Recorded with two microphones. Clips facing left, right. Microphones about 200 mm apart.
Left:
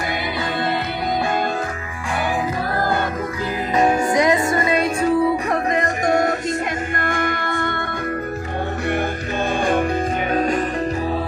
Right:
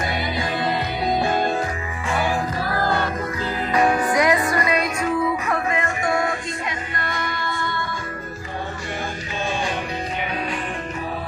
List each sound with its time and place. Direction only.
3.8 s music: 25° left (ahead or behind); by 7.9 s 55° left (ahead or behind)
10.3 s music: 45° left (ahead or behind)